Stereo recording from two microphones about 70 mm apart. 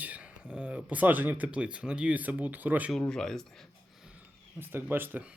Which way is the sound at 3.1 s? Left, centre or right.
Centre.